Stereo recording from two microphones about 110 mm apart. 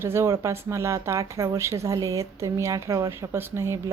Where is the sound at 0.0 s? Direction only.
25° right (ahead or behind).